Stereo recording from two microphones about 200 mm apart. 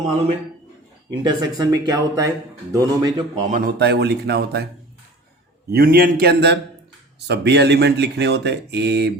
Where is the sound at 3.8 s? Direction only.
55° right (ahead or behind).